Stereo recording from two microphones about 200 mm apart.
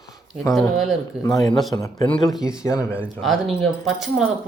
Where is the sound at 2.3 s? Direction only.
5° right (ahead or behind).